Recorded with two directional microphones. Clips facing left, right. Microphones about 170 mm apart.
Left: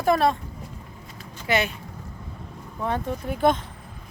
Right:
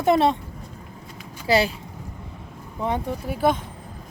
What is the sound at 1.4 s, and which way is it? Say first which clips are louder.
Speech: right 4 dB; 30° right (ahead or behind).